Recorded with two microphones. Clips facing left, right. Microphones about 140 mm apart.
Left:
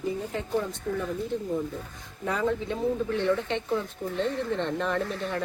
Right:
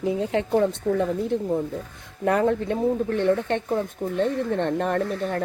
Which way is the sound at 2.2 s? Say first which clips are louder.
Right 7 dB; 60° right (ahead or behind).